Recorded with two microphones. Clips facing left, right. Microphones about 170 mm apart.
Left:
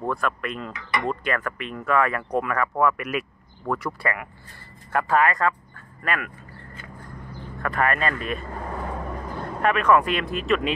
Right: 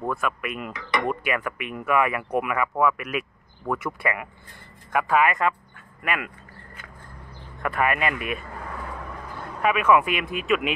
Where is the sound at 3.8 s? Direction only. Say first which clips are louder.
Even; 20° right (ahead or behind).